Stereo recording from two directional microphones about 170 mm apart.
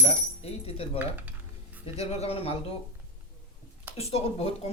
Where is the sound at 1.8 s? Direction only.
35° left (ahead or behind).